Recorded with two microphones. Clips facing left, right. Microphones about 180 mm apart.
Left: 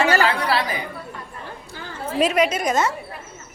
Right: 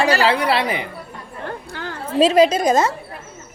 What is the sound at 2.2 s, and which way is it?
Speech, 30° right (ahead or behind).